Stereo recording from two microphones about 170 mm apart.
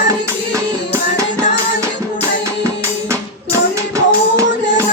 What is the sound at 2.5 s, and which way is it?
Music, 15° right (ahead or behind).